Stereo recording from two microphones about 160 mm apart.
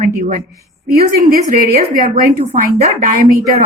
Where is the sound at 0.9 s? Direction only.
70° right (ahead or behind).